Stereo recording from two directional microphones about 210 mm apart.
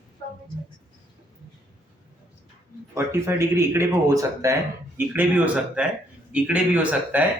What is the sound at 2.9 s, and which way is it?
Speech, 15° right (ahead or behind).